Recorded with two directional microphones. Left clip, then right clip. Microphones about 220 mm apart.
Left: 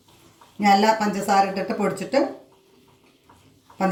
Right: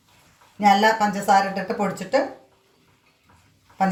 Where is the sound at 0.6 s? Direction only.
35° right (ahead or behind).